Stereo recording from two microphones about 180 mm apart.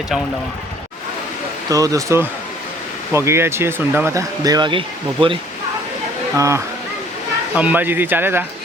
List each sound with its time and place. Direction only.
1.7 s speech: 20° right (ahead or behind)
6.3 s speech: 15° right (ahead or behind)